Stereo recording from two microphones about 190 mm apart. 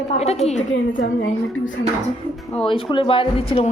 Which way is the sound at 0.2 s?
35° left (ahead or behind).